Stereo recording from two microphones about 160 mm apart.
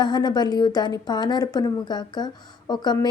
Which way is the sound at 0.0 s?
25° left (ahead or behind).